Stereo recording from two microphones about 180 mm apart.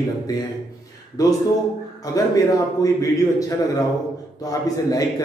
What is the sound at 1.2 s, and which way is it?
A man's voice, 20° left (ahead or behind).